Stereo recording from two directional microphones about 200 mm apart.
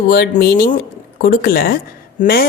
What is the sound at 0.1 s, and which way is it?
A woman's voice, 50° left (ahead or behind).